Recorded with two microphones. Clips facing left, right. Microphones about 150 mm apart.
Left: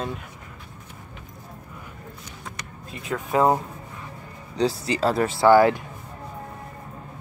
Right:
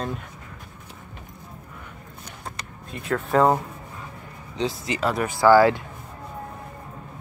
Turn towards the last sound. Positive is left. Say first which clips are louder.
# even
turn(degrees=20)  # may be behind; listen again after turning